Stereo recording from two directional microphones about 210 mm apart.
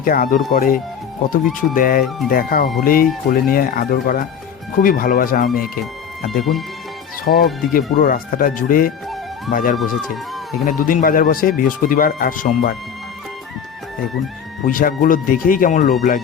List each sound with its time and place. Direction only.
0.0 s speech: 45° left (ahead or behind)
6.3 s speech: centre (ahead or behind)
7.3 s speech: 40° left (ahead or behind)
9.7 s speech: centre (ahead or behind)
10.7 s speech: 40° left (ahead or behind)
14.7 s speech: 40° left (ahead or behind)